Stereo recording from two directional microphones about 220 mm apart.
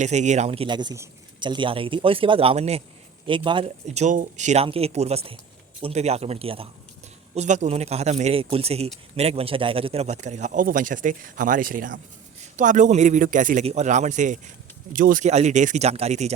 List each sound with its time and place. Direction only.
0.0 s a man's voice: 30° right (ahead or behind)